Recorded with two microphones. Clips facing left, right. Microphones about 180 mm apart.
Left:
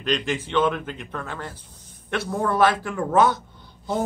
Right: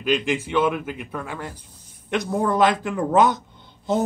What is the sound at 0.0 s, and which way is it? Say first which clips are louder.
Speech: right 3 dB; 10° right (ahead or behind).